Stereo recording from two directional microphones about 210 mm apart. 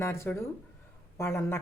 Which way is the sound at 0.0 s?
10° left (ahead or behind).